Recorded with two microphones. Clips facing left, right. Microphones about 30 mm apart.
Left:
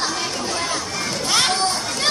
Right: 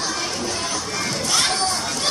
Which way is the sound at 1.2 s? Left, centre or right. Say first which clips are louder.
Left 3 dB; left.